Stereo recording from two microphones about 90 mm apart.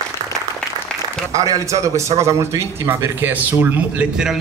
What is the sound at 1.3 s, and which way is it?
A man's voice, 40° right (ahead or behind).